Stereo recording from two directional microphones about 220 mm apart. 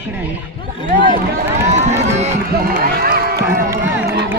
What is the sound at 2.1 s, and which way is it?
Speech, 30° right (ahead or behind).